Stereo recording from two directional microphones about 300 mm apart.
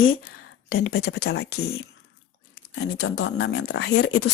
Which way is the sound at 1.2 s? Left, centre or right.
Left.